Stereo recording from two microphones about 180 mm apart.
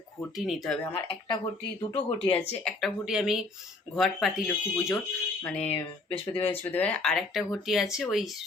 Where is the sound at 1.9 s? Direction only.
30° left (ahead or behind).